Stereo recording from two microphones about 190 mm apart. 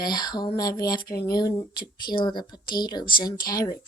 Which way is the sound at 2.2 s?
25° left (ahead or behind).